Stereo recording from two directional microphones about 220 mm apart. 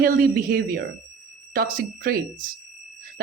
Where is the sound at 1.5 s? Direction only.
40° right (ahead or behind).